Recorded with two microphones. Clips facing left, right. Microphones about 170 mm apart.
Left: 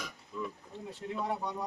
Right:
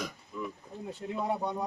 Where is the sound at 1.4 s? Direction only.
25° right (ahead or behind).